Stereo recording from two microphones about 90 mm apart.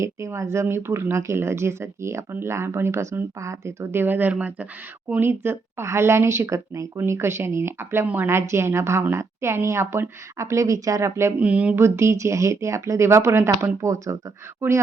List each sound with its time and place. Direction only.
0.0 s a woman's voice: 30° right (ahead or behind)
11.3 s speech: 15° right (ahead or behind)
11.8 s a woman's voice: 30° right (ahead or behind)